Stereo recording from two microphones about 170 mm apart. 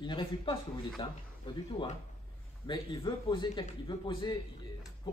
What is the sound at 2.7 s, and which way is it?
Speech, 30° left (ahead or behind).